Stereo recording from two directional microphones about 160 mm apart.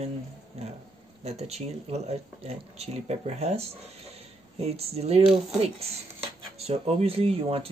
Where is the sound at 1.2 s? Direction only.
40° right (ahead or behind).